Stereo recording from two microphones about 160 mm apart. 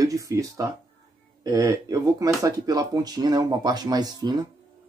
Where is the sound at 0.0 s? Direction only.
20° right (ahead or behind).